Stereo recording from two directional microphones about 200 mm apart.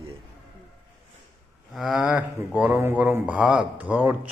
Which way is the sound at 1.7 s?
Centre (ahead or behind).